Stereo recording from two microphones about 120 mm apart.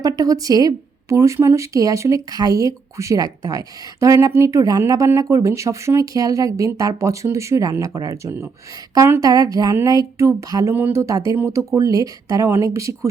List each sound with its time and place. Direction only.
0.0 s a woman's voice: 30° right (ahead or behind)
9.2 s a woman's voice: 30° right (ahead or behind)